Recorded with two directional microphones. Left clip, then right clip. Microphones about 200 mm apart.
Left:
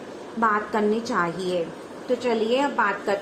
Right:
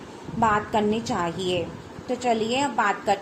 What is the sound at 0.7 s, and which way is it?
A woman's voice, 15° right (ahead or behind).